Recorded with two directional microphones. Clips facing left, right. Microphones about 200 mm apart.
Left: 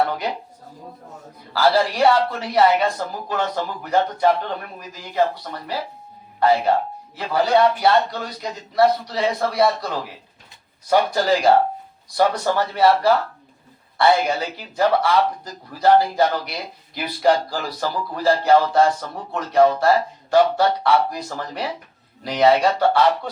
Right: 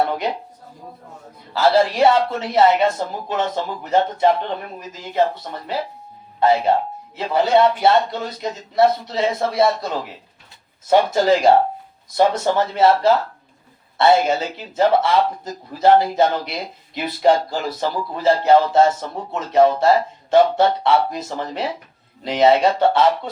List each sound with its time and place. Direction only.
1.5 s speech: 20° right (ahead or behind)